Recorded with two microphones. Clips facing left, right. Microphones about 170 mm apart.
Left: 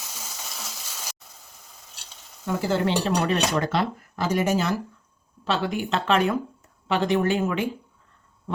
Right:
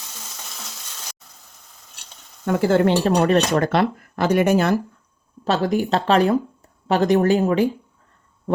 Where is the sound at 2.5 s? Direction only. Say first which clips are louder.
Right 7 dB; 60° right (ahead or behind).